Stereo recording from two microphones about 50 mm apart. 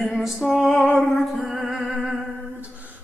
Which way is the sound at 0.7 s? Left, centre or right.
Left.